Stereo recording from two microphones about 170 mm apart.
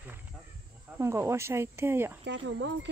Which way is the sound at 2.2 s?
90° right.